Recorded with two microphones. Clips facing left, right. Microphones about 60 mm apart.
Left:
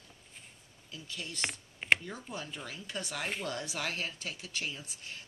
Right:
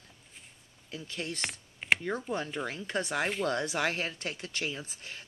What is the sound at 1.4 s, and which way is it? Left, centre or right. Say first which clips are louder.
Computer keyboard: even; centre.